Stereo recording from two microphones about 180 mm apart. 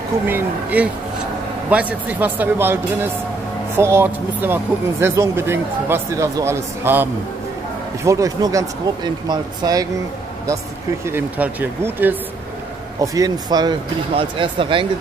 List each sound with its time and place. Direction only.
0.3 s speech: 10° right (ahead or behind)
11.1 s speech: 10° right (ahead or behind); by 14.9 s 30° right (ahead or behind)